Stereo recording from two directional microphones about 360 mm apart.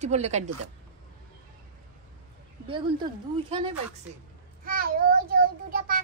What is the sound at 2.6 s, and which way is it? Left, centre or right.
Speech, centre.